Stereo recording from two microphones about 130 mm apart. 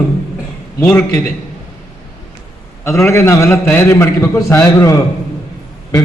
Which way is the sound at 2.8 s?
20° left (ahead or behind).